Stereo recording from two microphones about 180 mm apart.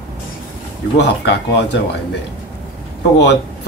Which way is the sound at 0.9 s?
70° left (ahead or behind).